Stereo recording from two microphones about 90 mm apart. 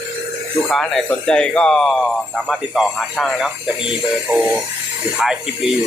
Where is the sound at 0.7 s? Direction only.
Centre (ahead or behind).